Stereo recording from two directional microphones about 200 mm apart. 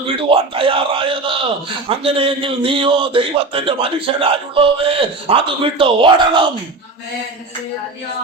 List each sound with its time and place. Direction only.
0.2 s a man's voice: 25° right (ahead or behind)